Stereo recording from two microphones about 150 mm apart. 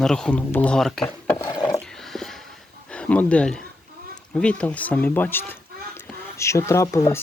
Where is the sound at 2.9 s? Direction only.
10° left (ahead or behind).